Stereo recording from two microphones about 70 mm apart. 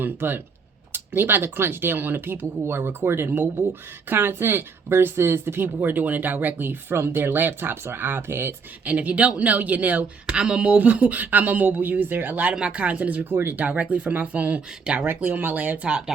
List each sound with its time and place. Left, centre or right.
0.0 s speech: right
8.8 s speech: right
10.2 s speech: centre; by 13.5 s right
13.6 s speech: right